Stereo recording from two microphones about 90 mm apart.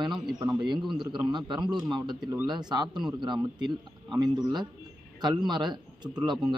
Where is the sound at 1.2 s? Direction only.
55° right (ahead or behind).